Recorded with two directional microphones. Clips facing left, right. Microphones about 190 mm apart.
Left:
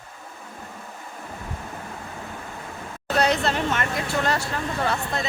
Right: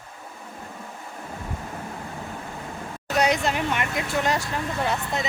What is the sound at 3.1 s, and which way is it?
Speech, 15° right (ahead or behind).